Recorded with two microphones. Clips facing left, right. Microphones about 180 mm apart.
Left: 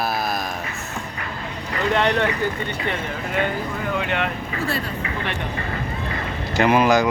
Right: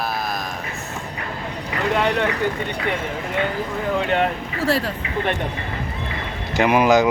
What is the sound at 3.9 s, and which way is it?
Speech, 35° right (ahead or behind).